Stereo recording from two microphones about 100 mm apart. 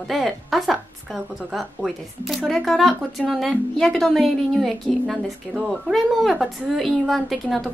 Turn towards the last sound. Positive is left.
turn(degrees=0)  # may be behind; listen again after turning